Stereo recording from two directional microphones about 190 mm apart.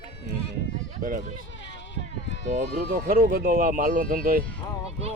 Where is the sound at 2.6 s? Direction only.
45° right (ahead or behind).